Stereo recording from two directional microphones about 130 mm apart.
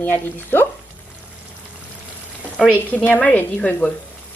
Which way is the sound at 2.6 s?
10° left (ahead or behind).